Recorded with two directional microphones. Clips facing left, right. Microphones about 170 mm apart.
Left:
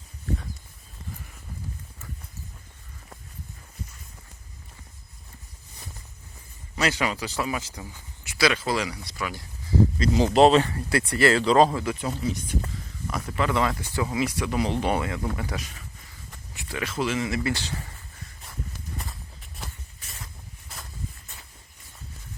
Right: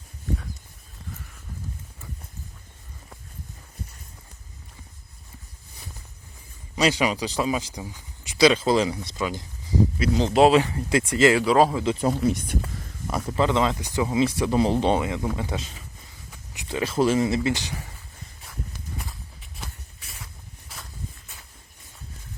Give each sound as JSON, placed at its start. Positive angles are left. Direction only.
{"t": 6.7, "sound": "speech", "side_deg": -15}
{"t": 10.0, "sound": "speech", "side_deg": 5}
{"t": 10.6, "sound": "speech", "side_deg": -20}
{"t": 11.9, "sound": "speech", "side_deg": -45}
{"t": 13.1, "sound": "speech", "side_deg": -35}
{"t": 16.5, "sound": "a sound", "side_deg": -15}
{"t": 16.7, "sound": "speech", "side_deg": -30}
{"t": 20.1, "sound": "walk", "side_deg": 0}